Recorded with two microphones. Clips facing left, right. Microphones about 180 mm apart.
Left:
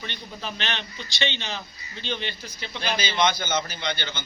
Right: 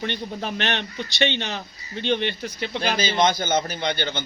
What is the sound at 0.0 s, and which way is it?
A man's voice, 55° right (ahead or behind).